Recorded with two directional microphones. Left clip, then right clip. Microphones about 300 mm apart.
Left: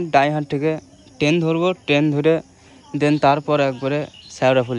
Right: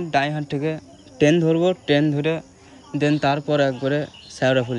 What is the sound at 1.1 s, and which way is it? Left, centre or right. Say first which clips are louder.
Speech: right 1 dB; centre.